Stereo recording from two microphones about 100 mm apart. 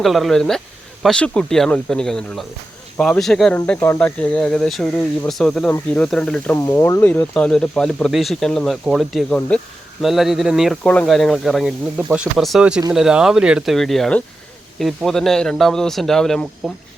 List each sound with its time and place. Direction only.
0.0 s speech: centre (ahead or behind)
3.8 s speech: 25° left (ahead or behind)
4.0 s speech: 10° left (ahead or behind)
6.7 s speech: 30° left (ahead or behind)
7.3 s speech: 10° left (ahead or behind)
9.5 s speech: 10° left (ahead or behind)
10.0 s speech: 5° right (ahead or behind)
11.9 s speech: 10° right (ahead or behind)
12.4 s speech: centre (ahead or behind)
13.7 s speech: 5° left (ahead or behind)